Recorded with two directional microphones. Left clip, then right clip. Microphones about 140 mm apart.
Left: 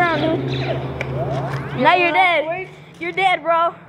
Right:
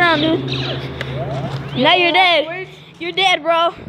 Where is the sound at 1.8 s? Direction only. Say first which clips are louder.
Right 1 dB; 35° right (ahead or behind).